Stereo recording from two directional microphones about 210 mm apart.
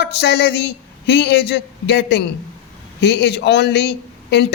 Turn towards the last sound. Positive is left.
turn(degrees=55)  # may be behind; listen again after turning